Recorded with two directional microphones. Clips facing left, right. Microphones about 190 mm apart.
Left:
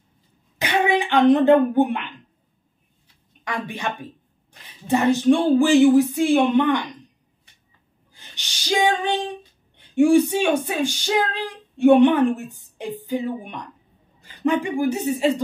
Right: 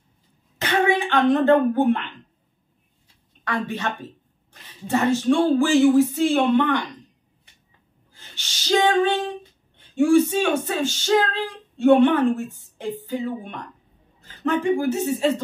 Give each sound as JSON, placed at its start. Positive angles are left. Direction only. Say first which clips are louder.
{"t": 0.6, "sound": "speech", "louder": "even", "side_deg": 15}
{"t": 3.4, "sound": "speech", "louder": "right 2 dB", "side_deg": 15}
{"t": 8.1, "sound": "a sound", "louder": "even", "side_deg": 15}
{"t": 9.8, "sound": "speech", "louder": "left 1 dB", "side_deg": 15}